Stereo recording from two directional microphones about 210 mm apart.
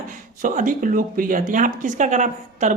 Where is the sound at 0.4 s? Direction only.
40° right (ahead or behind).